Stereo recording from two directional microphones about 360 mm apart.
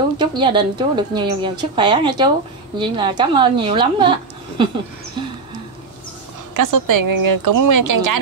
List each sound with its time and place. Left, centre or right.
0.2 s a woman's voice: centre
6.5 s speech: right